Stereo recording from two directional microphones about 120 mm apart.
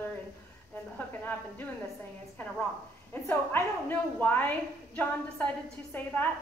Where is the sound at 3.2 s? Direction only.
15° left (ahead or behind).